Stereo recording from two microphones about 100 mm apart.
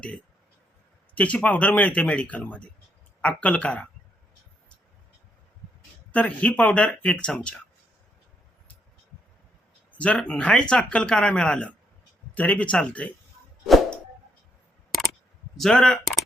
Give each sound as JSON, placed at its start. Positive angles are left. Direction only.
{"t": 1.1, "sound": "speech", "side_deg": 15}
{"t": 6.1, "sound": "speech", "side_deg": 15}
{"t": 9.9, "sound": "a sound", "side_deg": 15}
{"t": 10.2, "sound": "speech", "side_deg": 10}
{"t": 15.5, "sound": "speech", "side_deg": 5}